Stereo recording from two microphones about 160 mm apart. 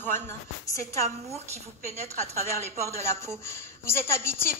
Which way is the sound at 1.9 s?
45° right (ahead or behind).